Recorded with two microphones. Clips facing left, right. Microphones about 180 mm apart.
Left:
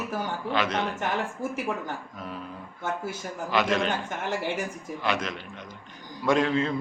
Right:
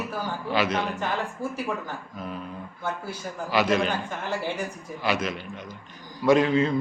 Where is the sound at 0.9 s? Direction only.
20° left (ahead or behind).